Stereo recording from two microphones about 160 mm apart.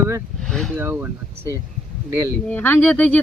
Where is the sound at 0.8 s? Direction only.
15° right (ahead or behind).